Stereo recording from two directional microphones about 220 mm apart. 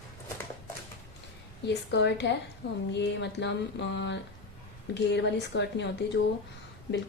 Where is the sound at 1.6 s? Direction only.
50° left (ahead or behind).